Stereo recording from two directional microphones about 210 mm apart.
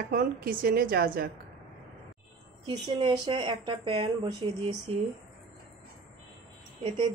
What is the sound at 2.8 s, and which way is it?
Speech, 20° right (ahead or behind).